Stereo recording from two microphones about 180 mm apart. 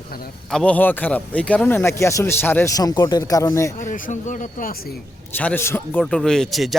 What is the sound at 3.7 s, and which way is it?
Speech, 45° left (ahead or behind).